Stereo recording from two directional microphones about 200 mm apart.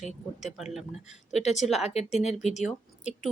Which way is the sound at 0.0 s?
35° left (ahead or behind).